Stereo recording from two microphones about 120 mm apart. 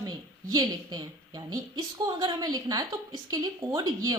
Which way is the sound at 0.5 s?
35° right (ahead or behind).